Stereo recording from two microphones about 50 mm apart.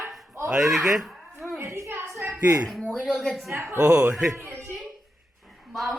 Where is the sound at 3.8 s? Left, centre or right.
Centre.